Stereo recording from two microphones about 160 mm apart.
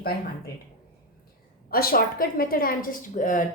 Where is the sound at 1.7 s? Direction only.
70° left (ahead or behind).